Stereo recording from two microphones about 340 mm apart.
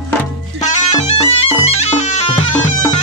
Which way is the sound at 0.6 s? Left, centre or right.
Centre.